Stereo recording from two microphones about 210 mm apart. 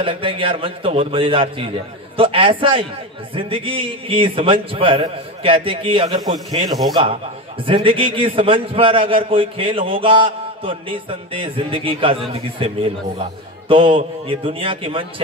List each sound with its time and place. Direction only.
0.0 s a man's voice: 25° right (ahead or behind)